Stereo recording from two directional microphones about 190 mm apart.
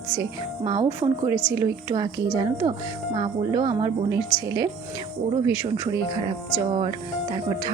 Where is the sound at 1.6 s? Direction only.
20° right (ahead or behind).